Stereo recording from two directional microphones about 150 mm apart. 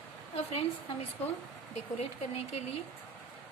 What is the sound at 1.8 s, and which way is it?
Speech, 45° left (ahead or behind).